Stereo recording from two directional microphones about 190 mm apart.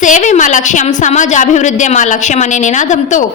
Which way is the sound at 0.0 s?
40° left (ahead or behind).